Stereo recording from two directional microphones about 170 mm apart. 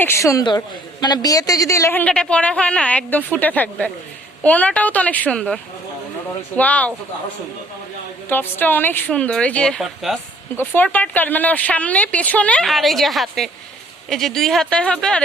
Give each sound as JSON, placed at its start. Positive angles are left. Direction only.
{"t": 0.0, "sound": "speech", "side_deg": 15}
{"t": 6.6, "sound": "speech", "side_deg": 10}
{"t": 8.3, "sound": "speech", "side_deg": 10}
{"t": 10.6, "sound": "speech", "side_deg": 10}